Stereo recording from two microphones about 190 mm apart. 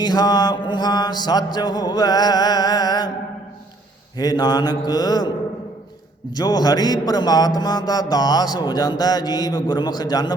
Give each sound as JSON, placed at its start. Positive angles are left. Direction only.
{"t": 0.0, "sound": "speech", "side_deg": 20}
{"t": 4.2, "sound": "speech", "side_deg": 20}
{"t": 6.3, "sound": "speech", "side_deg": 20}